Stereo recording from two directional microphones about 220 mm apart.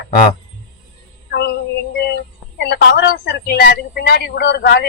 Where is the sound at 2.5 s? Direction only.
50° left (ahead or behind).